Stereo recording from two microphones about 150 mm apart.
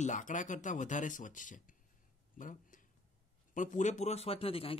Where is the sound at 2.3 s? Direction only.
65° left (ahead or behind).